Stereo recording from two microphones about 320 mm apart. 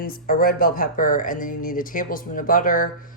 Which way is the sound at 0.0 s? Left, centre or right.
Left.